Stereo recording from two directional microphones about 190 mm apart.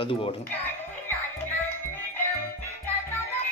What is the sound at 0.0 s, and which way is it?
Speech, 30° left (ahead or behind).